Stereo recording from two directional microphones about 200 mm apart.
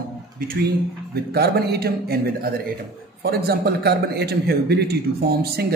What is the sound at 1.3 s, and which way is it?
A man's voice, 50° right (ahead or behind).